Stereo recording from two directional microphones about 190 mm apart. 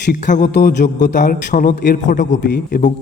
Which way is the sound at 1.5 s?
40° left (ahead or behind).